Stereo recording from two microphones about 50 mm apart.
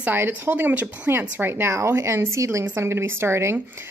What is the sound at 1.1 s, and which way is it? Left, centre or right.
Speech, right.